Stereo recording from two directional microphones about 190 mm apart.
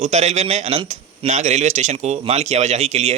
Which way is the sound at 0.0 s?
35° right (ahead or behind).